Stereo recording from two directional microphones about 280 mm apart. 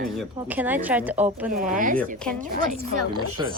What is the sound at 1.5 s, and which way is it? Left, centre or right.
A woman's voice, right.